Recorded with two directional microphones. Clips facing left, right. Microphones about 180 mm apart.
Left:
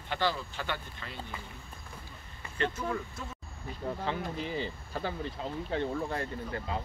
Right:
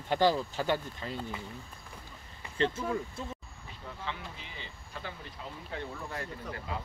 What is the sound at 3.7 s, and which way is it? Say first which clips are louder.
Speech: left 7 dB; 40° left (ahead or behind).